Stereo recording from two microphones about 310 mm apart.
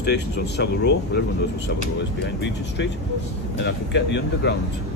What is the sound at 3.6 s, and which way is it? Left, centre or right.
Speech, left.